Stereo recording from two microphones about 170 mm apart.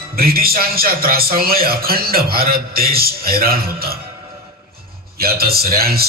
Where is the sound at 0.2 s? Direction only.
60° right (ahead or behind).